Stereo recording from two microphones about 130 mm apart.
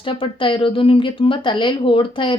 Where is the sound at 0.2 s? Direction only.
40° left (ahead or behind).